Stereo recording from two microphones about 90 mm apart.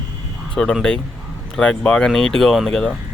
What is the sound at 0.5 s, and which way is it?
Speech, 5° left (ahead or behind).